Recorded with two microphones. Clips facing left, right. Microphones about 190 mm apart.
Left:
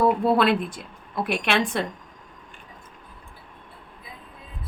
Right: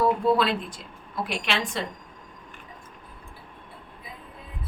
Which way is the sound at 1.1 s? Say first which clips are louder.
Left 5 dB; 55° left (ahead or behind).